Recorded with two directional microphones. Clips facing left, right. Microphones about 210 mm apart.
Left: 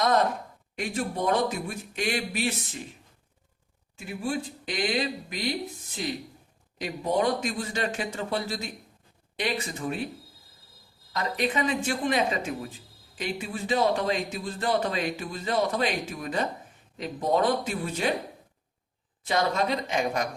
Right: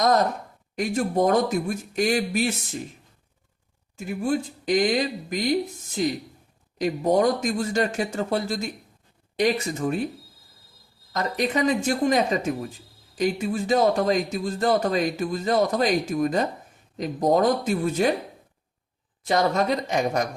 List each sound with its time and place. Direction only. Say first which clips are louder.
0.8 s speech: right 7 dB; 45° right (ahead or behind)
3.9 s speech: right 6 dB; 45° right (ahead or behind)
11.1 s speech: right 3 dB; 45° right (ahead or behind)
19.2 s speech: right 4 dB; 45° right (ahead or behind)